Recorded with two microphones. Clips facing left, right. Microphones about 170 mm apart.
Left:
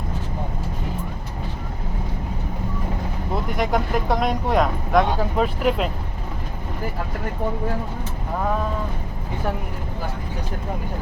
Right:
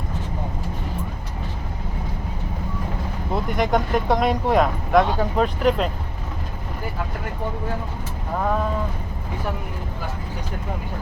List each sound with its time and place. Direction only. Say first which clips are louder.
3.3 s speech: right 2 dB; centre (ahead or behind)